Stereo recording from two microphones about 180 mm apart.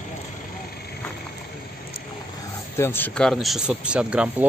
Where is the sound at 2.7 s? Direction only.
10° left (ahead or behind); by 4.4 s 5° right (ahead or behind).